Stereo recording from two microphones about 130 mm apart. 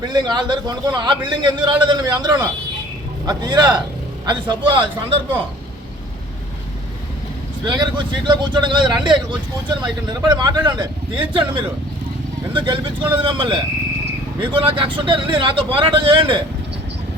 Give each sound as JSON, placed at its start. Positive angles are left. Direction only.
{"t": 0.0, "sound": "speech", "side_deg": -35}
{"t": 7.6, "sound": "speech", "side_deg": -35}